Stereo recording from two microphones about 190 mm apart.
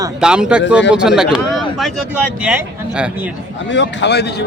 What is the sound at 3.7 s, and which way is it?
Speech, 70° left (ahead or behind).